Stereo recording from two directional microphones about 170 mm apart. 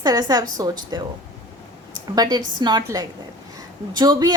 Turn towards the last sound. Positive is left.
turn(degrees=-25)  # may be behind; listen again after turning